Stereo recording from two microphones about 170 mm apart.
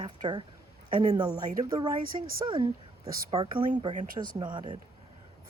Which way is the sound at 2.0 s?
55° right (ahead or behind).